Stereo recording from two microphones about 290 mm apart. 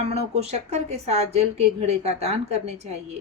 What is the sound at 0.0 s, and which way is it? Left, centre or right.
Speech, right.